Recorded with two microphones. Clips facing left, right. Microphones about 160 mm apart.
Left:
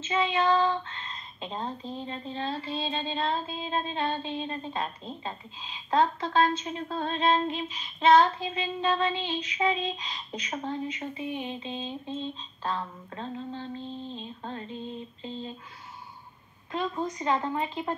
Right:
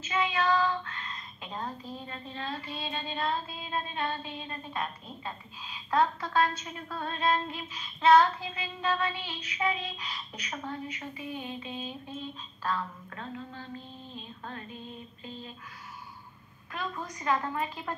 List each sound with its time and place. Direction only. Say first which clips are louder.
0.0 s speech: left 3 dB; 25° left (ahead or behind)
16.7 s speech: left 7 dB; 25° left (ahead or behind)